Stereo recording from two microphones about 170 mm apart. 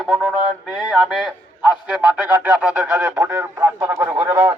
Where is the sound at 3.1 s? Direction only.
15° right (ahead or behind).